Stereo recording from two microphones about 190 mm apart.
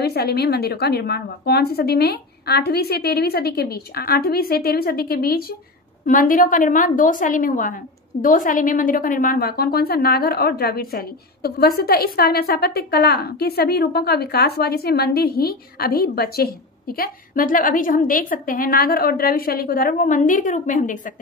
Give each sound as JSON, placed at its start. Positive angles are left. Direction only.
{"t": 0.0, "sound": "a woman's voice", "side_deg": 55}